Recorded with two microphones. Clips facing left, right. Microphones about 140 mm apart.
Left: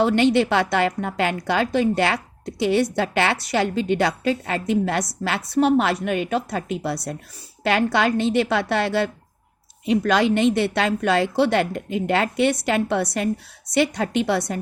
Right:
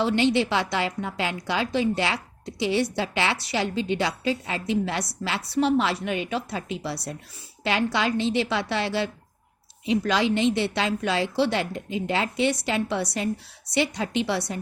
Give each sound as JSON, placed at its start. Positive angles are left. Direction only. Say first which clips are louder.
{"t": 0.0, "sound": "a woman's voice", "louder": "left 4 dB", "side_deg": 50}